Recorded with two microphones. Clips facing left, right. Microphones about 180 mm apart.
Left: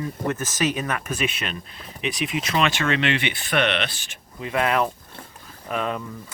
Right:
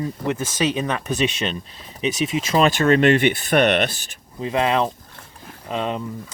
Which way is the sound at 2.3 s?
35° right (ahead or behind).